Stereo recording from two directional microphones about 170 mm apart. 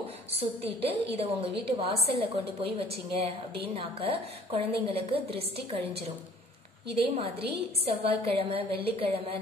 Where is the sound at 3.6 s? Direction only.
35° right (ahead or behind).